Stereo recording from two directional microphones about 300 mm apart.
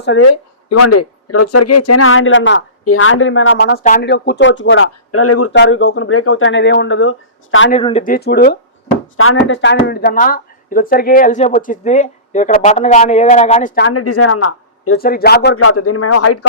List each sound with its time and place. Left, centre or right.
0.0 s speech: left
0.3 s speech: left
7.7 s speech: centre
13.8 s speech: left
14.9 s speech: left
15.5 s a man's voice: left